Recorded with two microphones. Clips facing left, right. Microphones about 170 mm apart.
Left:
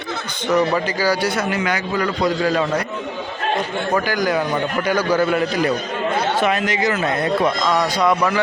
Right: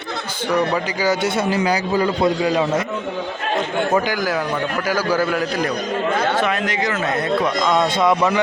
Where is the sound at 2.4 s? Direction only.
15° right (ahead or behind).